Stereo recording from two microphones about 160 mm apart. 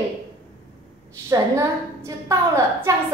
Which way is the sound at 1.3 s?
20° right (ahead or behind).